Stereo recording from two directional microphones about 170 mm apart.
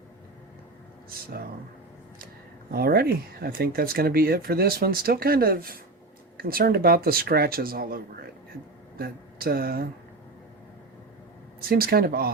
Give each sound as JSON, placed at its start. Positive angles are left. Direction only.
{"t": 2.7, "sound": "speech", "side_deg": -65}
{"t": 11.7, "sound": "speech", "side_deg": -60}